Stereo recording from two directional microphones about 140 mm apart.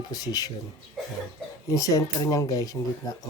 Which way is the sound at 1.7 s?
25° left (ahead or behind).